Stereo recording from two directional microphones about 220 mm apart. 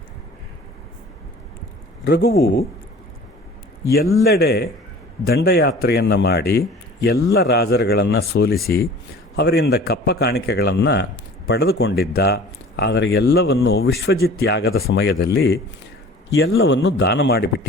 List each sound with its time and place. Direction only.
2.0 s speech: 45° left (ahead or behind)
4.2 s speech: 45° left (ahead or behind)